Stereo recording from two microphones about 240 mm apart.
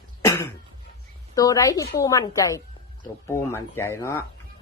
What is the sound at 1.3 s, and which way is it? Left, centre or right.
Speech, centre.